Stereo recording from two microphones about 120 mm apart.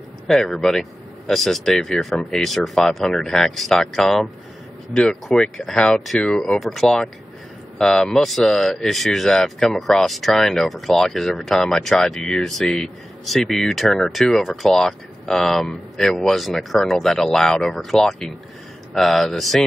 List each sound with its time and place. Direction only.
0.3 s speech: centre (ahead or behind)